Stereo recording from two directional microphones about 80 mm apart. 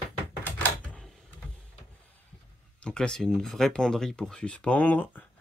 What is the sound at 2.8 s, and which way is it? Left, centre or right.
Speech, centre.